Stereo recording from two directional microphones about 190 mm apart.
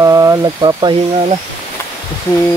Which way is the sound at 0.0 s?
15° right (ahead or behind).